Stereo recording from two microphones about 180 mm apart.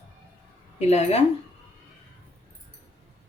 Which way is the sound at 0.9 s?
35° left (ahead or behind).